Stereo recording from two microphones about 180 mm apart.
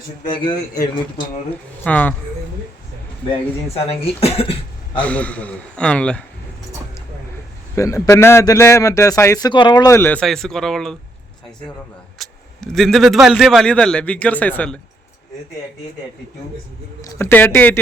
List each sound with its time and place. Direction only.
0.3 s a man's voice: 25° left (ahead or behind)
1.8 s a man's voice: 10° left (ahead or behind)
3.7 s speech: 35° left (ahead or behind)
4.9 s a man's voice: 5° left (ahead or behind)
7.8 s a man's voice: 15° left (ahead or behind)
12.2 s a man's voice: centre (ahead or behind)
17.0 s a man's voice: 15° left (ahead or behind)